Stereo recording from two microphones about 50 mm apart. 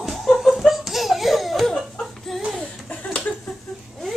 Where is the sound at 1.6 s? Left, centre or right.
Centre.